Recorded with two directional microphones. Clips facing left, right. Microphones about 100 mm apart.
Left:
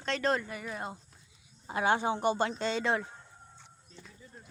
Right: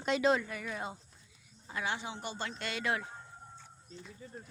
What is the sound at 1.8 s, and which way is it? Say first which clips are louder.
Speech: left 12 dB; 50° left (ahead or behind).